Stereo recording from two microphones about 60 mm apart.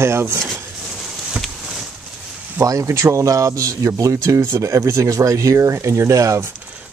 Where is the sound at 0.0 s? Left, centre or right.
Right.